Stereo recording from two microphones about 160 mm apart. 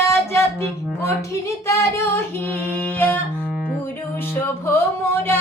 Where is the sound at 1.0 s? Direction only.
20° left (ahead or behind).